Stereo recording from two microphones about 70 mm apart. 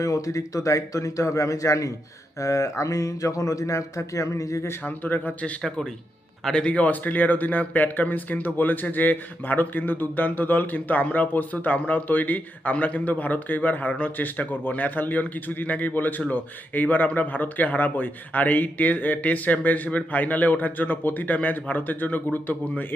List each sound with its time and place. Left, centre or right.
0.0 s speech: left
4.8 s speech: left
5.6 s speech: centre; by 23.0 s left